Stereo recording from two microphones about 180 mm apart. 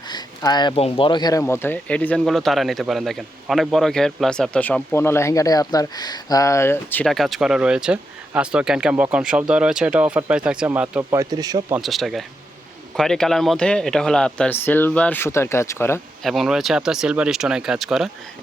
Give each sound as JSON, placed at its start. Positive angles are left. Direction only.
{"t": 0.1, "sound": "speech", "side_deg": 25}
{"t": 11.2, "sound": "speech", "side_deg": -20}
{"t": 11.7, "sound": "speech", "side_deg": 0}
{"t": 16.2, "sound": "speech", "side_deg": 0}